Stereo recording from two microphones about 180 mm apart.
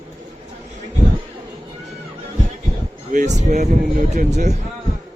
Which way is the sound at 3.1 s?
45° right (ahead or behind).